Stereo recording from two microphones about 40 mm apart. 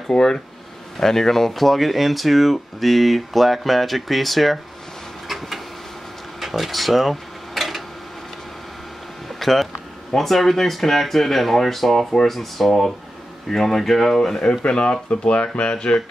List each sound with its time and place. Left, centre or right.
0.1 s speech: centre
6.4 s a sound: centre
9.4 s speech: centre
14.6 s speech: left
15.7 s speech: left